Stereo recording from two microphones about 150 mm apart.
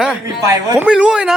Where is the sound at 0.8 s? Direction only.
5° right (ahead or behind).